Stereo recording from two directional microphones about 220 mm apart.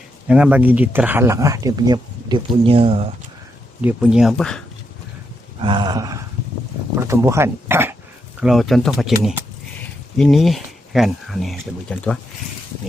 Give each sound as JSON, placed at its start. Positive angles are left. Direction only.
{"t": 0.3, "sound": "speech", "side_deg": -5}
{"t": 3.8, "sound": "speech", "side_deg": -5}
{"t": 5.6, "sound": "a sound", "side_deg": -20}
{"t": 6.9, "sound": "speech", "side_deg": -15}